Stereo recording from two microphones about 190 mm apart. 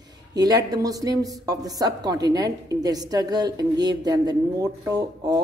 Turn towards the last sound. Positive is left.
turn(degrees=-20)  # may be behind; listen again after turning